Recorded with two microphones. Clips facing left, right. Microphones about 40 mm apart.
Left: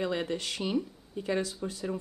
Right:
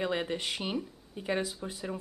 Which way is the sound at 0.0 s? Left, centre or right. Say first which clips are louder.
Even; centre.